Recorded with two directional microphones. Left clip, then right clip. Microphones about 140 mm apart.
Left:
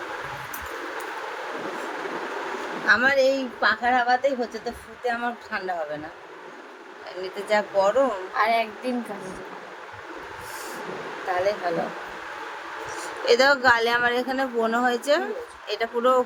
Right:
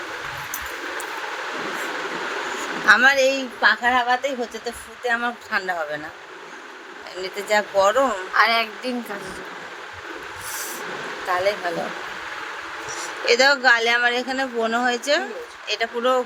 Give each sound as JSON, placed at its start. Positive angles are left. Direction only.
{"t": 2.8, "sound": "speech", "side_deg": 0}
{"t": 7.2, "sound": "speech", "side_deg": -5}
{"t": 8.4, "sound": "a woman's voice", "side_deg": 5}
{"t": 12.9, "sound": "speech", "side_deg": 35}